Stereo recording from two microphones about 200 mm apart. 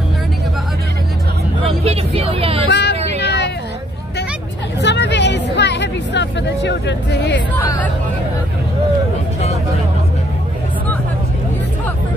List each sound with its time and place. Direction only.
1.6 s vehicle: 30° right (ahead or behind)
2.7 s a sound: 55° left (ahead or behind)
4.8 s music: 60° left (ahead or behind)